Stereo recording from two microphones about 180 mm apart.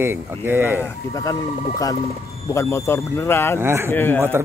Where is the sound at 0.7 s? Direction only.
20° left (ahead or behind).